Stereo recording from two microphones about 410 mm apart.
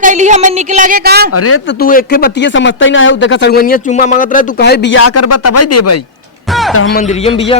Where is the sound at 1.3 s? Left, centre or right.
Left.